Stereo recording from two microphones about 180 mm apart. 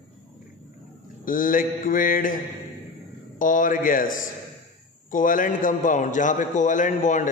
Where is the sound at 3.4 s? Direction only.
45° left (ahead or behind).